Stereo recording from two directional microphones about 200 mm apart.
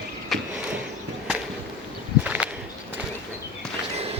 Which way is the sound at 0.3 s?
Centre (ahead or behind).